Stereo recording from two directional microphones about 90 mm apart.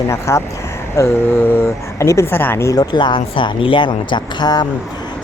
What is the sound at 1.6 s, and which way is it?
Speech, 35° left (ahead or behind).